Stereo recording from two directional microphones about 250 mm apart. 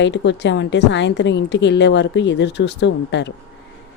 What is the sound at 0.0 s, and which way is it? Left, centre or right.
A woman's voice, left.